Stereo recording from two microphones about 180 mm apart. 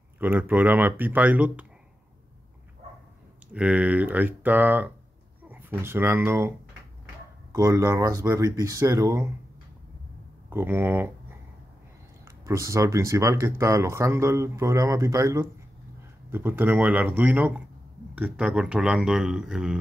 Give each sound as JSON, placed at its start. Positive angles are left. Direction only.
{"t": 0.2, "sound": "speech", "side_deg": -10}
{"t": 3.5, "sound": "speech", "side_deg": -5}
{"t": 7.5, "sound": "speech", "side_deg": -15}
{"t": 10.5, "sound": "speech", "side_deg": -10}